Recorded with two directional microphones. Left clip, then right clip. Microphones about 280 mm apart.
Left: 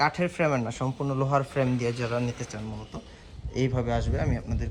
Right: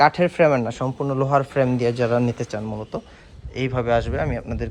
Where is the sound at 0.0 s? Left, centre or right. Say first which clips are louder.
Right 9 dB; centre.